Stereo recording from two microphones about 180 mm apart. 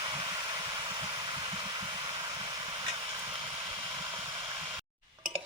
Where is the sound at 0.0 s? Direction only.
20° right (ahead or behind).